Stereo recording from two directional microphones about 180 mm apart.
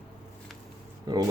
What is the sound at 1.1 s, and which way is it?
Speech, 20° right (ahead or behind).